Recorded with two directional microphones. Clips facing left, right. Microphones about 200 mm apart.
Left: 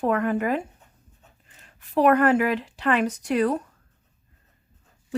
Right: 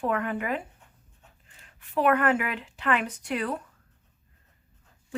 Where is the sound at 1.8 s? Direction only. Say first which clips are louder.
Left 5 dB; 40° left (ahead or behind).